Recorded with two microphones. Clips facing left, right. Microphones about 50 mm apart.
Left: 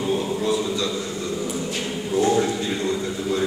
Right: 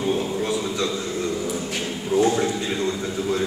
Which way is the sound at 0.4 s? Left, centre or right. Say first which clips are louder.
Left 2 dB; right.